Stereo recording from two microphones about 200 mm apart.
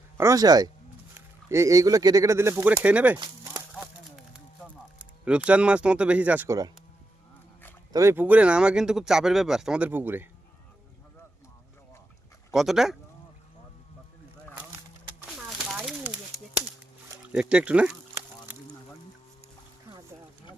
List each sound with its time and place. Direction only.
0.2 s speech: 15° right (ahead or behind)
4.9 s speech: 5° right (ahead or behind)
7.9 s speech: 10° right (ahead or behind)
12.5 s speech: centre (ahead or behind)
15.4 s a sound: 5° right (ahead or behind)
17.5 s speech: 5° right (ahead or behind)